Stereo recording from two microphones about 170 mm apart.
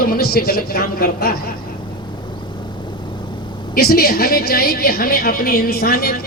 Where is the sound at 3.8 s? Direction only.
65° left (ahead or behind).